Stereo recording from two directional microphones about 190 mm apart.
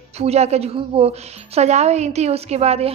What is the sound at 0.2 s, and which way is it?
A woman's voice, 35° right (ahead or behind).